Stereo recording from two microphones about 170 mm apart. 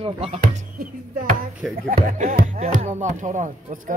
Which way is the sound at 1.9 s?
45° right (ahead or behind).